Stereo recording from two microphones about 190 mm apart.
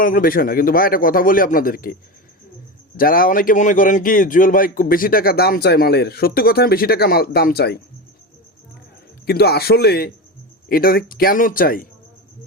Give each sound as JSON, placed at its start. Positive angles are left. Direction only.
{"t": 0.0, "sound": "a man's voice", "side_deg": 45}
{"t": 3.0, "sound": "a man's voice", "side_deg": 50}
{"t": 9.2, "sound": "a man's voice", "side_deg": 55}